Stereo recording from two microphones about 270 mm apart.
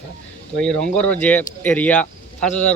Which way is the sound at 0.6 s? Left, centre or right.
Centre.